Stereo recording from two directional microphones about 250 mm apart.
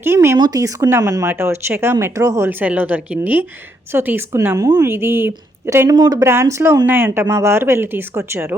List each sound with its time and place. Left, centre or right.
0.0 s a woman's voice: centre